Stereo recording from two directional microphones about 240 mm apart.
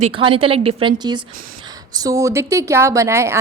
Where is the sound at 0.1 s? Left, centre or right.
Right.